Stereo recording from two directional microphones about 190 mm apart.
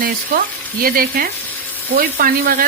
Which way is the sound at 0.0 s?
50° right (ahead or behind).